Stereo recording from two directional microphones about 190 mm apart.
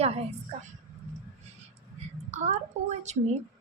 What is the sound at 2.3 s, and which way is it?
Speech, 35° right (ahead or behind).